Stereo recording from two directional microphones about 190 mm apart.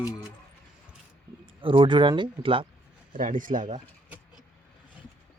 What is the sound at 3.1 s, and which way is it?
Speech, 45° right (ahead or behind).